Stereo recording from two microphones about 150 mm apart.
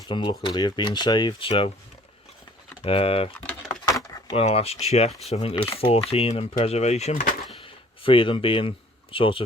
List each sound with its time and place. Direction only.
0.1 s speech: 30° left (ahead or behind)
2.8 s speech: 40° left (ahead or behind)
4.4 s speech: 40° left (ahead or behind); by 7.3 s 60° left (ahead or behind)
7.5 s a sound: 35° left (ahead or behind)
9.1 s speech: 35° left (ahead or behind)